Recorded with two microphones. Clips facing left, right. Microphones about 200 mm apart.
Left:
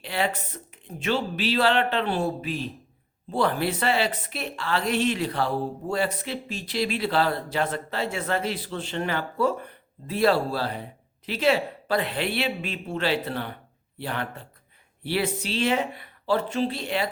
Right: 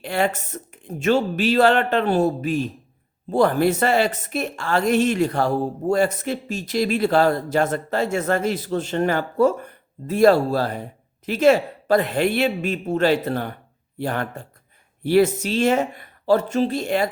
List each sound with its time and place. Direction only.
0.0 s a woman's voice: 50° right (ahead or behind)